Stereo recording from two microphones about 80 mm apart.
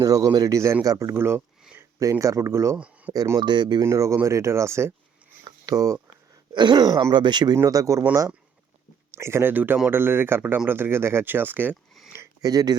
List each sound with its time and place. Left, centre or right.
0.0 s speech: right
2.0 s speech: right
2.7 s a sound: centre
3.3 s speech: right
3.8 s speech: right
5.5 s a sound: right
6.5 s speech: right
7.5 s speech: right
9.1 s speech: right
12.2 s speech: right